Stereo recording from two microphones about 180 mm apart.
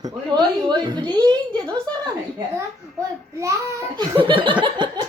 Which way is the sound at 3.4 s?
15° right (ahead or behind).